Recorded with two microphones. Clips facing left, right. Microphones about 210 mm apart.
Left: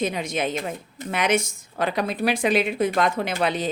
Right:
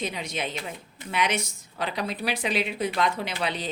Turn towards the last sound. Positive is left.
turn(degrees=50)  # may be behind; listen again after turning